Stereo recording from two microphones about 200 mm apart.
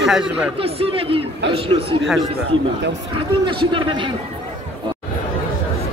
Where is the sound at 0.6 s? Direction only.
30° right (ahead or behind).